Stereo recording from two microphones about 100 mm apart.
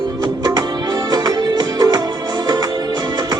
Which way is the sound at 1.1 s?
45° right (ahead or behind).